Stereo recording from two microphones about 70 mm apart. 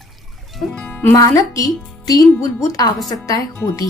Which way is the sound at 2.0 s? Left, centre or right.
Left.